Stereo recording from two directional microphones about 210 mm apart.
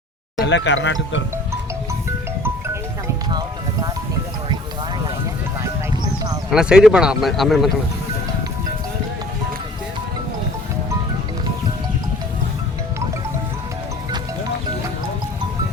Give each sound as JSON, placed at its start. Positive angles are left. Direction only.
{"t": 0.4, "sound": "speech", "side_deg": 55}
{"t": 3.2, "sound": "music", "side_deg": -20}
{"t": 6.5, "sound": "speech", "side_deg": -5}